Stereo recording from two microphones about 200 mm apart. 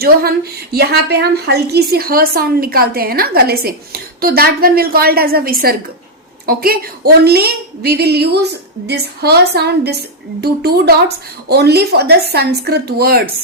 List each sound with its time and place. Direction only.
0.0 s a woman's voice: 50° right (ahead or behind)